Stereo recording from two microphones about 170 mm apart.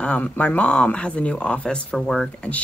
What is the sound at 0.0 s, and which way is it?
Speech, 5° left (ahead or behind).